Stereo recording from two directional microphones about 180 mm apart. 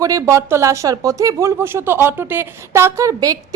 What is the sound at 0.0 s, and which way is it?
Speech, 20° right (ahead or behind).